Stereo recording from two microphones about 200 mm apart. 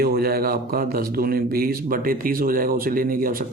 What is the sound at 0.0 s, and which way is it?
Speech, 50° right (ahead or behind).